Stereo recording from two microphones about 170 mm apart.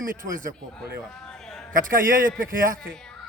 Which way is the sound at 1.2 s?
5° left (ahead or behind).